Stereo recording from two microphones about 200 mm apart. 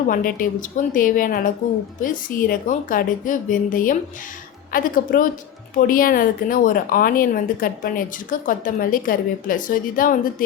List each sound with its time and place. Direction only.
0.1 s a woman's voice: 45° left (ahead or behind)